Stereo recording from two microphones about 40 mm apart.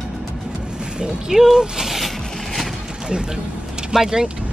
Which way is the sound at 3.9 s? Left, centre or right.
Centre.